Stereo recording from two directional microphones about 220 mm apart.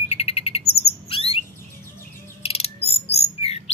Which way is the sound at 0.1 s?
25° left (ahead or behind).